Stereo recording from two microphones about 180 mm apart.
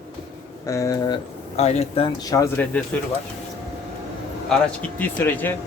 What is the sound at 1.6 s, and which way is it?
Speech, 35° left (ahead or behind).